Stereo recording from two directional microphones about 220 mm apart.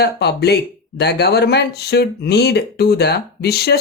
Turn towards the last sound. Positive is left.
turn(degrees=45)  # may be behind; listen again after turning